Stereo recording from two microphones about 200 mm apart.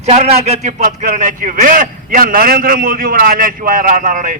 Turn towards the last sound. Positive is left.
turn(degrees=-40)  # may be behind; listen again after turning